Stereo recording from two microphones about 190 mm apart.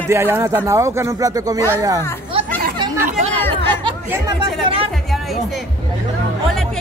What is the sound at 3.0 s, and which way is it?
Chatter, 35° right (ahead or behind).